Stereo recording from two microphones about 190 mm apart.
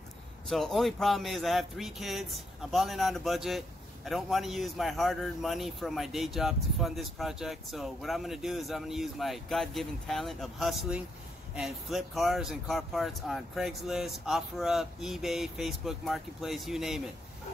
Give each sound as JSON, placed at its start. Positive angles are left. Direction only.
{"t": 0.5, "sound": "speech", "side_deg": 0}